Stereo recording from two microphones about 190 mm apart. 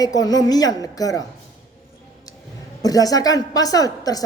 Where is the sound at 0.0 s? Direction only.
20° left (ahead or behind).